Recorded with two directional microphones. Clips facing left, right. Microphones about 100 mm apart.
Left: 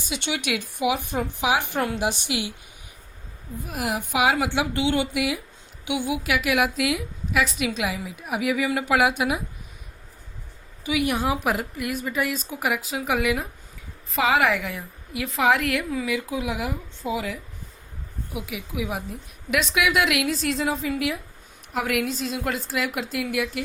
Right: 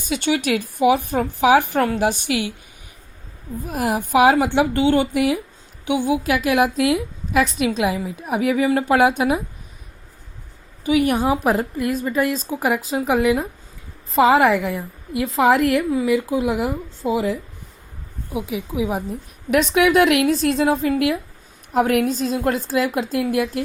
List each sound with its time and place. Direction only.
0.0 s speech: 45° right (ahead or behind)
3.6 s a woman's voice: 40° right (ahead or behind)
10.8 s a woman's voice: 45° right (ahead or behind); by 17.3 s 30° right (ahead or behind)
18.3 s a woman's voice: 30° right (ahead or behind)
19.5 s speech: 45° right (ahead or behind)
21.7 s a woman's voice: 40° right (ahead or behind)